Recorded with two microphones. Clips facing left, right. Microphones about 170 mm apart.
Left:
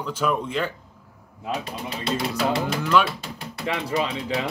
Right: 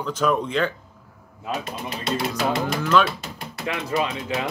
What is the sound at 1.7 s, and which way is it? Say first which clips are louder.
Speech: even; 35° left (ahead or behind).